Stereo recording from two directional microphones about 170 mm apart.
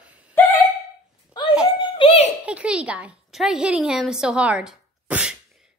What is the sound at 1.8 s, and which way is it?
Giggle, 30° left (ahead or behind).